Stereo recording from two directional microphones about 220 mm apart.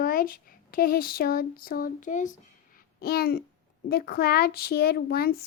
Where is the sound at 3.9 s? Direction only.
45° left (ahead or behind).